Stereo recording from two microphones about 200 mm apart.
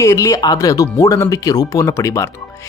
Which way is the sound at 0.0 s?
15° left (ahead or behind).